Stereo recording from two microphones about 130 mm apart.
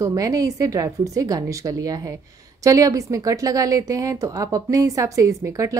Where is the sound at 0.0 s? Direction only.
25° right (ahead or behind).